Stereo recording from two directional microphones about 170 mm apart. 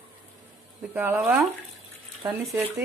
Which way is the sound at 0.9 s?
10° right (ahead or behind).